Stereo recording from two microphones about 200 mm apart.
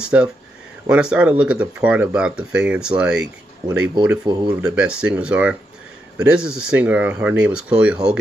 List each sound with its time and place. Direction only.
0.0 s speech: 5° right (ahead or behind)
4.3 s speech: 20° right (ahead or behind)
4.6 s speech: 5° right (ahead or behind)